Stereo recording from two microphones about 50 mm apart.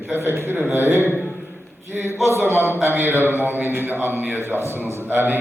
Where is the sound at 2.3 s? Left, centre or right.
Right.